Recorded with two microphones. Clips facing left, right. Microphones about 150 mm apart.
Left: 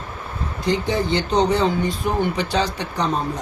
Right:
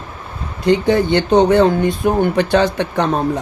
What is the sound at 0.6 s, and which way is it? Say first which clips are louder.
Speech: right 8 dB; 60° right (ahead or behind).